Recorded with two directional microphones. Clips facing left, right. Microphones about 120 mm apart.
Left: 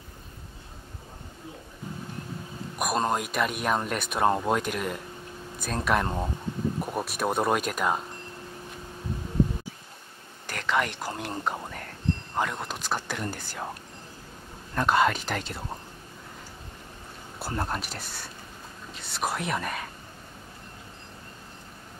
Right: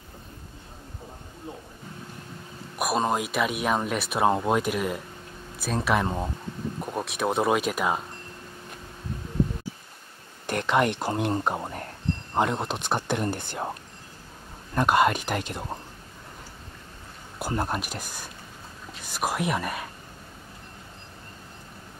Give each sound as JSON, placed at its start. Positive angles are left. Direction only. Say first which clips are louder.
{"t": 2.8, "sound": "speech", "louder": "right 2 dB", "side_deg": 0}
{"t": 10.4, "sound": "speech", "louder": "right 4 dB", "side_deg": -20}
{"t": 14.8, "sound": "speech", "louder": "right 2 dB", "side_deg": -10}
{"t": 17.4, "sound": "speech", "louder": "right 3 dB", "side_deg": -15}